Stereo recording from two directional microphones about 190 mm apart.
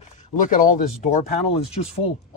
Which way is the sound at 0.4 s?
45° left (ahead or behind).